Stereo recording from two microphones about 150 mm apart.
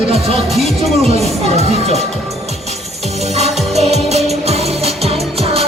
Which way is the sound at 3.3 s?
45° right (ahead or behind).